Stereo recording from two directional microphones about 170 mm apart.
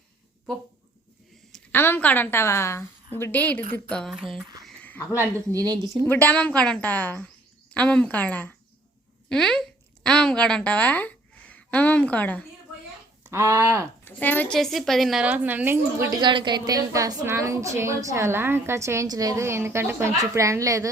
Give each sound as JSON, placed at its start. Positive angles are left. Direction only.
{"t": 1.7, "sound": "a woman's voice", "side_deg": 15}
{"t": 4.6, "sound": "a sound", "side_deg": 10}
{"t": 5.5, "sound": "speech", "side_deg": -25}
{"t": 6.1, "sound": "a woman's voice", "side_deg": 10}
{"t": 13.3, "sound": "a woman's voice", "side_deg": -15}
{"t": 14.0, "sound": "a woman's voice", "side_deg": 10}
{"t": 16.2, "sound": "a woman's voice", "side_deg": -25}